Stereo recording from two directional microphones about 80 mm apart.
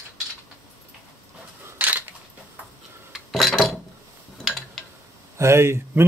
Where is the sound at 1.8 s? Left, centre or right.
Right.